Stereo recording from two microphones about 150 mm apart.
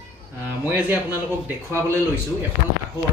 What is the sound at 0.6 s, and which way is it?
Speech, 15° right (ahead or behind).